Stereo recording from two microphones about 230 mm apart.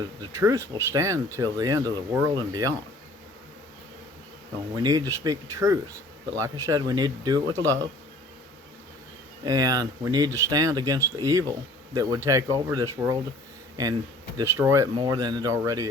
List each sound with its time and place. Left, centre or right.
0.0 s speech: centre
4.7 s speech: centre
9.4 s speech: centre
14.3 s speech: centre